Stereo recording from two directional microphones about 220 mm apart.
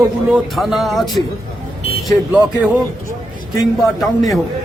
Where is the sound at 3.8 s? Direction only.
Centre (ahead or behind).